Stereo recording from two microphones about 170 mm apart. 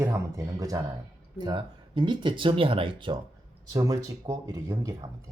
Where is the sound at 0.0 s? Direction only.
15° right (ahead or behind).